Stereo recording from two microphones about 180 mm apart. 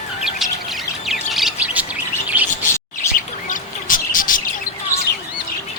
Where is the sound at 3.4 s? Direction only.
50° left (ahead or behind).